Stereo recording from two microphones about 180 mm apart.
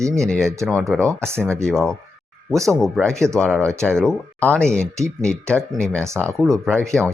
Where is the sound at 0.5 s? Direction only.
15° right (ahead or behind).